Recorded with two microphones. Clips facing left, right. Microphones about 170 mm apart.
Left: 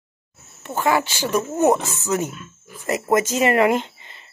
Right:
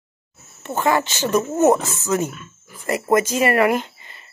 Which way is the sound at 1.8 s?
15° left (ahead or behind).